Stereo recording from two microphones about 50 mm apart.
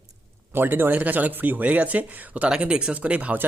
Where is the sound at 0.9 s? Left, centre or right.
Right.